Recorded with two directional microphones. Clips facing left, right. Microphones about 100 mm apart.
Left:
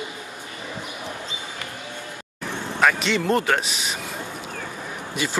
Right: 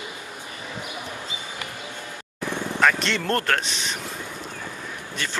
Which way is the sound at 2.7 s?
5° left (ahead or behind).